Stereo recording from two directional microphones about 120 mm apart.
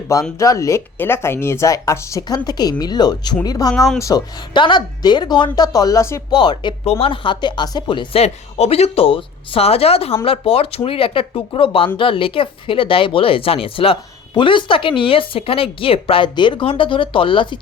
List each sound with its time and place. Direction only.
0.1 s speech: 25° left (ahead or behind)
6.3 s speech: 40° left (ahead or behind)